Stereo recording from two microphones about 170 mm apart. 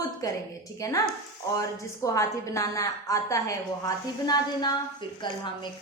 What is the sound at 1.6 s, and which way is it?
A woman's voice, 20° left (ahead or behind).